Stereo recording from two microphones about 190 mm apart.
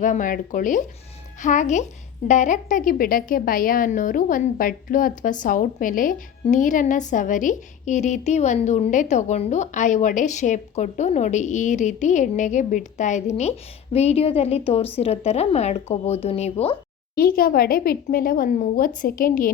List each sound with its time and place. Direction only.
0.0 s a woman's voice: 45° left (ahead or behind)
17.2 s speech: 50° left (ahead or behind)